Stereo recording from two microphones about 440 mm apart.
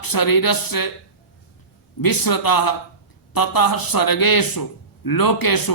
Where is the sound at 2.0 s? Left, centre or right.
Left.